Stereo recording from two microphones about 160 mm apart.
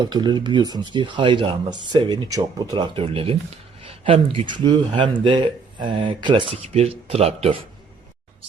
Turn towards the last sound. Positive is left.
turn(degrees=-35)  # may be behind; listen again after turning